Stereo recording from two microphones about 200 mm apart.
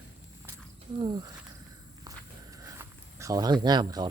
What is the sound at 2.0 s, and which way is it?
Walk, 15° right (ahead or behind).